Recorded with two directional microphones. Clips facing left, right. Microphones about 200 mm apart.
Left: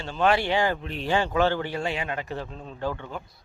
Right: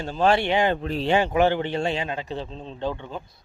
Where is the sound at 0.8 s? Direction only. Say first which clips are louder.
Right 7 dB; 40° right (ahead or behind).